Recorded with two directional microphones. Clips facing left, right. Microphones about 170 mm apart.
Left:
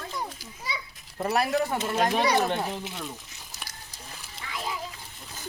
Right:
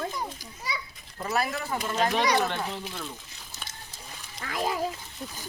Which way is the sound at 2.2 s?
20° left (ahead or behind).